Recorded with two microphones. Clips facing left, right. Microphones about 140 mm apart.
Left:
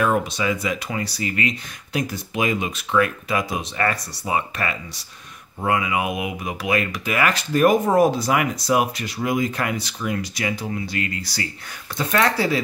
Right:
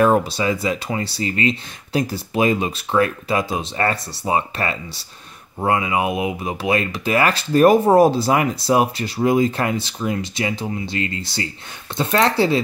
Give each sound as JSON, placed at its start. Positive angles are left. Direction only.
{"t": 0.0, "sound": "speech", "side_deg": -35}